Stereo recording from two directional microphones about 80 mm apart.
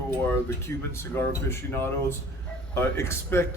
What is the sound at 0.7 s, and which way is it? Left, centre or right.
Speech, left.